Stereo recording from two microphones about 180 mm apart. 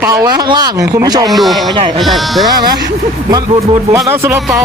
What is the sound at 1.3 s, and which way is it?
Speech, centre (ahead or behind).